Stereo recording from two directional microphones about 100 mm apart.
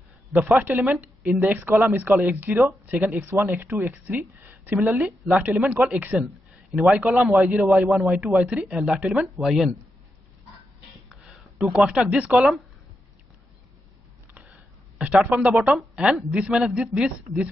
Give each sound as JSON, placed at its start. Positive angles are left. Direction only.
{"t": 0.3, "sound": "speech", "side_deg": -20}
{"t": 5.0, "sound": "speech", "side_deg": -5}
{"t": 6.1, "sound": "speech", "side_deg": 0}
{"t": 11.2, "sound": "a sound", "side_deg": -5}
{"t": 11.8, "sound": "speech", "side_deg": -5}
{"t": 14.3, "sound": "a sound", "side_deg": -15}
{"t": 15.2, "sound": "speech", "side_deg": -15}